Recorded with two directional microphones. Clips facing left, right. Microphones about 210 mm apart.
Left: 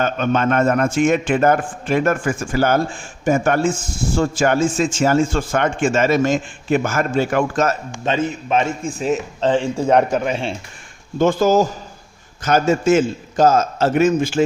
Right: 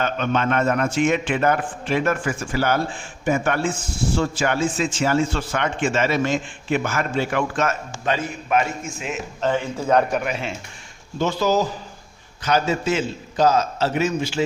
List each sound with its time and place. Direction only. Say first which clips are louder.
0.0 s speech: left 4 dB; 45° left (ahead or behind)
8.0 s a man's voice: left 4 dB; 25° left (ahead or behind)
11.2 s speech: left 6 dB; 50° left (ahead or behind)